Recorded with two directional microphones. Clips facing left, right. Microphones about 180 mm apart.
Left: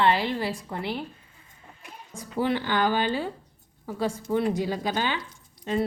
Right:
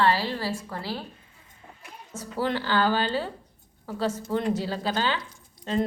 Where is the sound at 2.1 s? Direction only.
15° left (ahead or behind).